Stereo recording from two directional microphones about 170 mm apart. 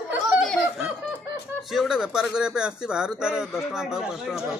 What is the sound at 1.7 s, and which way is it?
Speech, 5° right (ahead or behind).